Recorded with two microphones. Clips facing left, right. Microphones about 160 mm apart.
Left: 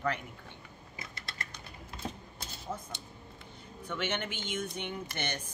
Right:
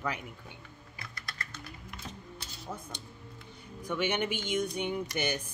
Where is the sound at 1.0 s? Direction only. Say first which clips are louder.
Even; 25° left (ahead or behind).